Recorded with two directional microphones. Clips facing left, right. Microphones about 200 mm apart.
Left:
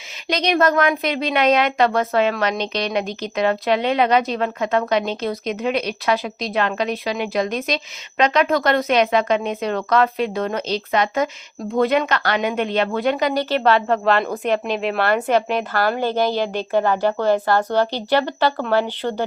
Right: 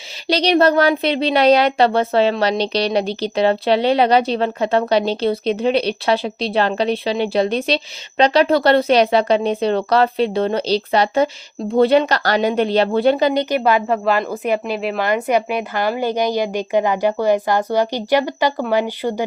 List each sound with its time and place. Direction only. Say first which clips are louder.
0.3 s speech: right 4 dB; 35° right (ahead or behind)
13.4 s a woman's voice: right 1 dB; 15° right (ahead or behind)